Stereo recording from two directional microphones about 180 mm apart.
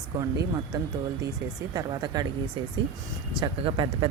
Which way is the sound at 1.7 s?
25° right (ahead or behind).